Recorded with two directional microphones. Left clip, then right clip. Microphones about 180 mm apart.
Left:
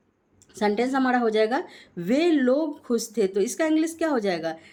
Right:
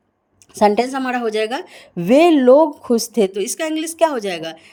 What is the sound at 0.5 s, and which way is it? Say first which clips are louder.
Speech: right 8 dB; 35° right (ahead or behind).